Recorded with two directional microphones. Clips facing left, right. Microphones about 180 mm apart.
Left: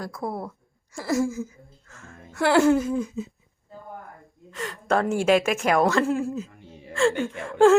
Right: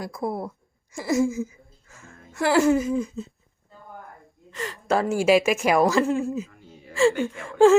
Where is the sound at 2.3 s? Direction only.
Centre (ahead or behind).